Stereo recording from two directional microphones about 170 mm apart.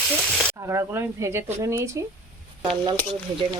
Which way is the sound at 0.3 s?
5° left (ahead or behind).